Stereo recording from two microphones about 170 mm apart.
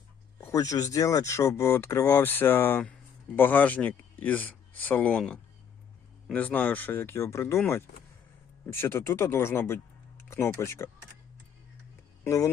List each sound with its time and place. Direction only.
0.3 s speech: 15° left (ahead or behind)
8.6 s speech: 15° left (ahead or behind)
12.2 s speech: 20° left (ahead or behind)